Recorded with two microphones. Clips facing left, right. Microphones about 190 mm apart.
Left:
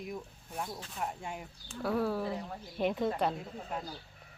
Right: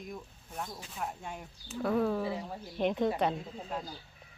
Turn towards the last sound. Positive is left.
turn(degrees=0)  # may be behind; listen again after turning